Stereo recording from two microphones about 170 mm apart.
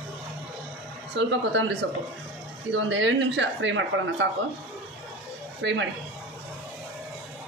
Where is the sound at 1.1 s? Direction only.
90° right.